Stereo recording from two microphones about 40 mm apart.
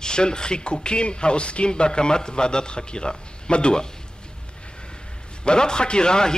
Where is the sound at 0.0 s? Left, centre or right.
Left.